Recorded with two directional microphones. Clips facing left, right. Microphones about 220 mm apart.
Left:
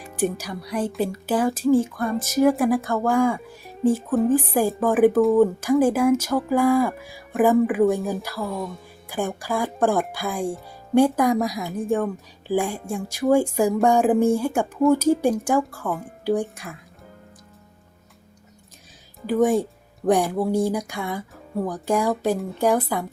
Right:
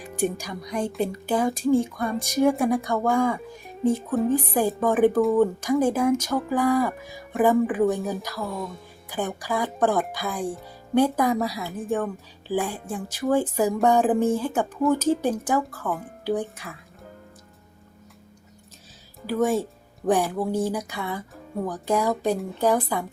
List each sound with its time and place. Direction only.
0.2 s speech: 5° left (ahead or behind)
19.3 s speech: 15° left (ahead or behind)